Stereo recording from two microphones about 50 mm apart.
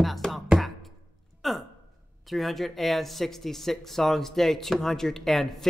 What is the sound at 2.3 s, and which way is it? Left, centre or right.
Speech, centre.